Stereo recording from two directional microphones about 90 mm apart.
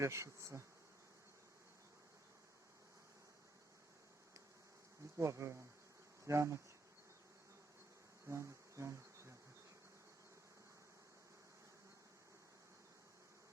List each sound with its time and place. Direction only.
0.0 s bee: 35° right (ahead or behind)
5.1 s bee: 35° right (ahead or behind)
8.3 s bee: 35° right (ahead or behind)